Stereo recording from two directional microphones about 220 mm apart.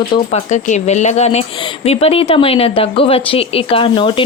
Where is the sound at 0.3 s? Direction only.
30° left (ahead or behind).